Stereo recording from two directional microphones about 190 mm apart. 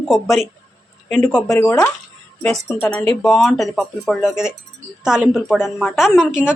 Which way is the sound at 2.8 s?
10° left (ahead or behind).